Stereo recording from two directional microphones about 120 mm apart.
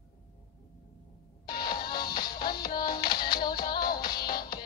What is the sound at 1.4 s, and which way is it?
Music, 35° left (ahead or behind).